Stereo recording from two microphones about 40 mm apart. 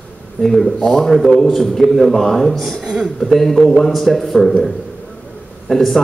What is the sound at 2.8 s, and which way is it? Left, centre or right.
Speech, centre.